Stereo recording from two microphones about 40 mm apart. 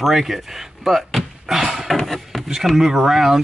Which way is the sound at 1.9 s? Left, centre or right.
Centre.